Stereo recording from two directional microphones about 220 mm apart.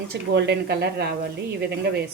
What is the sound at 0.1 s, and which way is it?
A woman's voice, 50° right (ahead or behind).